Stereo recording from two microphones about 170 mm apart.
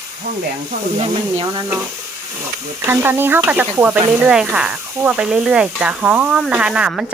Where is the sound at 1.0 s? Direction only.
20° right (ahead or behind).